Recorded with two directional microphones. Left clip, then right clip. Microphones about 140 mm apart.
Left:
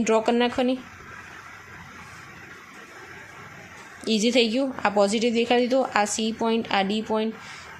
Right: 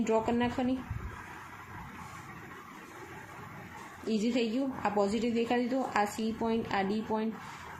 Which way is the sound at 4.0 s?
35° left (ahead or behind).